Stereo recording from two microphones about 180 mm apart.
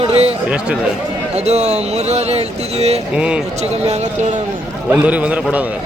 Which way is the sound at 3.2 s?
5° right (ahead or behind).